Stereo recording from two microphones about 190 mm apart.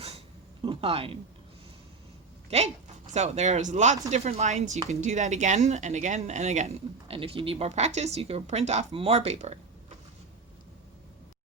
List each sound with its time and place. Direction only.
0.6 s speech: 30° right (ahead or behind)
2.5 s speech: 35° right (ahead or behind)